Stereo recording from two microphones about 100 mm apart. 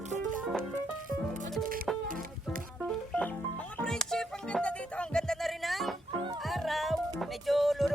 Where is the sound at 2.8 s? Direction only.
10° left (ahead or behind).